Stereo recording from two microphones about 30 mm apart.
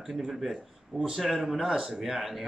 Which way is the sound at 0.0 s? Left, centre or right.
Centre.